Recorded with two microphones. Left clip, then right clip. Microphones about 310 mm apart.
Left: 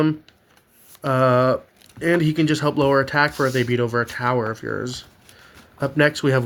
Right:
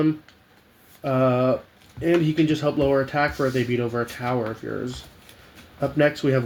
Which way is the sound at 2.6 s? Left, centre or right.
Left.